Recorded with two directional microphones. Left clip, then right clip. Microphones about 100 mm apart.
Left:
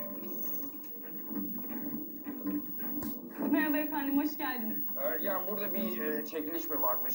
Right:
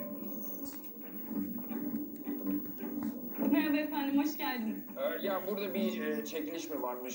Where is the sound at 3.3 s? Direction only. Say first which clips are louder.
Left 1 dB; 25° right (ahead or behind).